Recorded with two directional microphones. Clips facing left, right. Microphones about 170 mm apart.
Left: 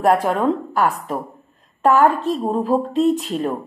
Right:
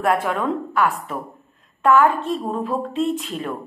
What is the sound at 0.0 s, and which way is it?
A woman's voice, 35° left (ahead or behind).